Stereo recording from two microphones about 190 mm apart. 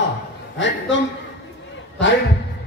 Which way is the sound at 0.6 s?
75° left (ahead or behind).